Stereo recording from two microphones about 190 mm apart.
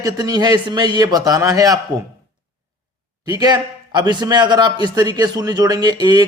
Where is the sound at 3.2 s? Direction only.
20° right (ahead or behind).